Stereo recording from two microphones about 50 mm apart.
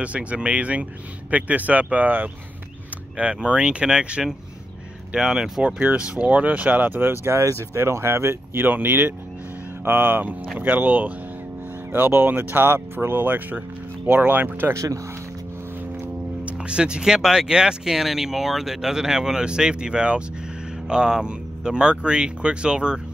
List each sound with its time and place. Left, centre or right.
0.0 s speech: right
3.2 s speech: right
5.8 s speech: right
7.2 s speech: right
8.6 s speech: right
14.7 s speech: right
16.4 s speech: right